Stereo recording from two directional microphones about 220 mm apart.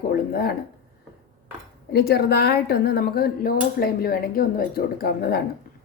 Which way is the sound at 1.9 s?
45° left (ahead or behind).